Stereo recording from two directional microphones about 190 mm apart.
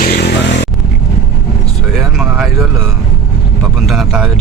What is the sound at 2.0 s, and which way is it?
Vehicle, 5° right (ahead or behind).